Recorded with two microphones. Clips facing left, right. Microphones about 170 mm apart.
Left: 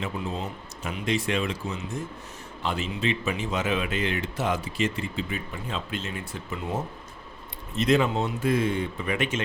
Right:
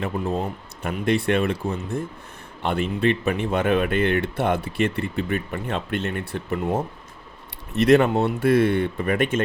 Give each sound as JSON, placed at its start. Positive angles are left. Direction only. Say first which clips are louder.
{"t": 0.0, "sound": "speech", "louder": "right 6 dB", "side_deg": -55}
{"t": 7.7, "sound": "speech", "louder": "right 6 dB", "side_deg": -65}